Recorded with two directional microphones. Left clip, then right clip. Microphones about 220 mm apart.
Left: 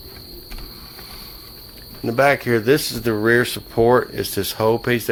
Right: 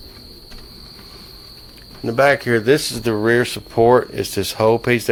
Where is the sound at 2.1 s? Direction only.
5° right (ahead or behind).